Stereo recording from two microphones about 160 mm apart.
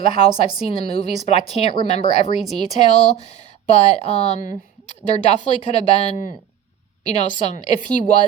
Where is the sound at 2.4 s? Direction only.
Centre (ahead or behind).